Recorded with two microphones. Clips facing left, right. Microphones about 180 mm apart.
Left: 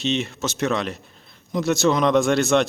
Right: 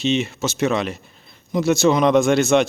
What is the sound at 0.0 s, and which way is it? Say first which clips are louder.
Speech: right 3 dB; centre (ahead or behind).